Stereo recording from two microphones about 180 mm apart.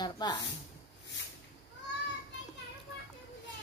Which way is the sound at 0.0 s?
25° left (ahead or behind).